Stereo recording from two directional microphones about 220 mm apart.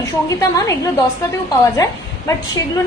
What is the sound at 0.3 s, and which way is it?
A woman's voice, 15° left (ahead or behind).